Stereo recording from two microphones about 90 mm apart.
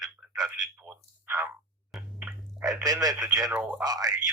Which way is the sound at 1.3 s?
30° right (ahead or behind).